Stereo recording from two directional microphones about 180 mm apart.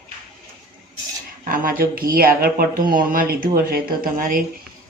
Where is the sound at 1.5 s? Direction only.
55° right (ahead or behind).